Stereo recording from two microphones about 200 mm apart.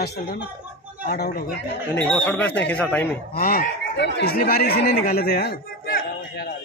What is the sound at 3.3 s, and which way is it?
Speech, 45° left (ahead or behind).